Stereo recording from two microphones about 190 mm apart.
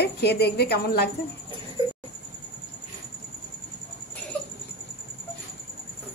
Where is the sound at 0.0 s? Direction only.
60° left (ahead or behind).